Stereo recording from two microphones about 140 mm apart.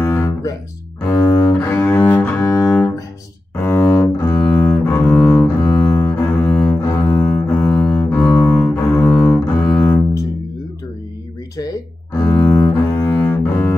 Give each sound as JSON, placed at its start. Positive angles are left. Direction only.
{"t": 0.0, "sound": "guitar", "side_deg": 15}
{"t": 1.0, "sound": "cello", "side_deg": 15}
{"t": 4.8, "sound": "double bass", "side_deg": 15}
{"t": 11.5, "sound": "cello", "side_deg": 25}